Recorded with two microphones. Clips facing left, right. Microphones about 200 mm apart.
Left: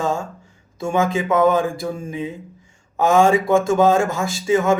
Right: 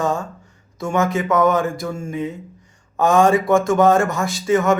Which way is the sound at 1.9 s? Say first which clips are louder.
Right 1 dB; 10° left (ahead or behind).